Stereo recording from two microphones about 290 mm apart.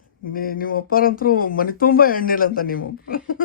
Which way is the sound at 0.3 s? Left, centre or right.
Left.